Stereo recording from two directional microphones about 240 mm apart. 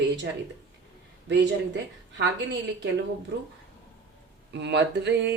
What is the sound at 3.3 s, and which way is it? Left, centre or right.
Speech, right.